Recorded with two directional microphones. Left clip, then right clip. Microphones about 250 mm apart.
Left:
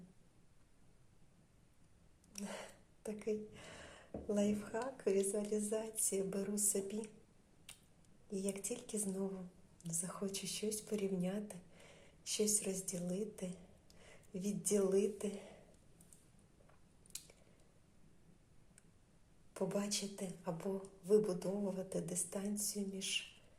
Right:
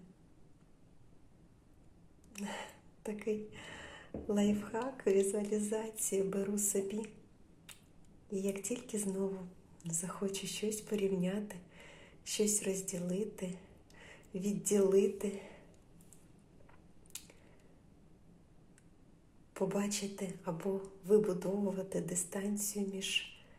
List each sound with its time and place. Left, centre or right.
2.3 s speech: centre
6.5 s speech: left
6.7 s speech: centre
8.3 s speech: centre
19.5 s speech: centre